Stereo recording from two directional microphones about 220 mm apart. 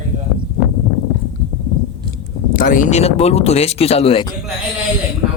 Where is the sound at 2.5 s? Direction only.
40° left (ahead or behind).